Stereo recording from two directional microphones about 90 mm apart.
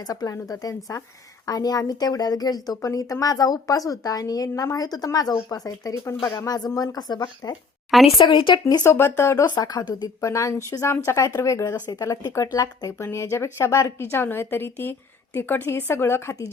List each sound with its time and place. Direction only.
0.0 s a woman's voice: 45° left (ahead or behind)
8.2 s speech: 70° left (ahead or behind)
8.8 s a woman's voice: 30° left (ahead or behind)
13.0 s a woman's voice: 30° left (ahead or behind)